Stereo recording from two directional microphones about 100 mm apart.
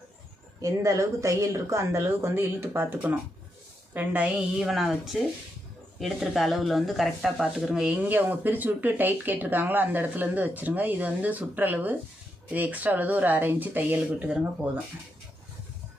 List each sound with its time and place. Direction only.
0.6 s speech: 35° right (ahead or behind); by 7.9 s 5° right (ahead or behind)
7.9 s speech: 15° right (ahead or behind)